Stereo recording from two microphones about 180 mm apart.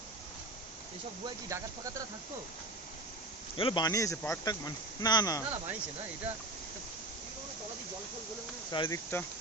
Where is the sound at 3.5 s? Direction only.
25° left (ahead or behind).